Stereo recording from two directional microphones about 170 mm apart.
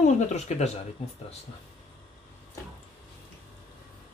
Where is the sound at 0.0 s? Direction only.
40° left (ahead or behind).